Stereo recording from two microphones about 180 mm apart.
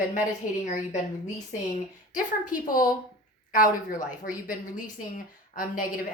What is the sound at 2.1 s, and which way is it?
Speech, 50° left (ahead or behind).